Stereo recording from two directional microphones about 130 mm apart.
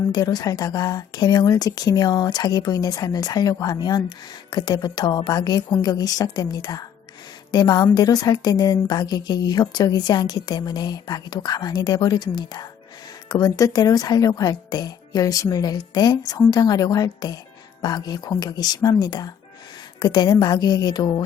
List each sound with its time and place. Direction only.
0.1 s a woman's voice: 30° left (ahead or behind)